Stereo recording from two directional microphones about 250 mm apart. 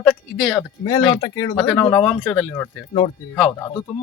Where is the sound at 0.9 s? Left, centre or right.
Centre.